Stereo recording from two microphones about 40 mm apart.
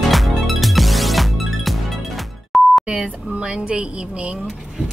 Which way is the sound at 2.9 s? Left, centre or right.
Right.